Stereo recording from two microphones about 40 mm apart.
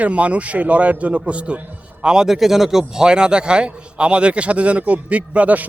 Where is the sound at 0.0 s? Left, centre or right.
Right.